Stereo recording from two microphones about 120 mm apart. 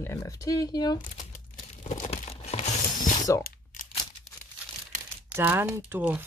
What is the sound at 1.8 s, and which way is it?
Crumpling, 80° left.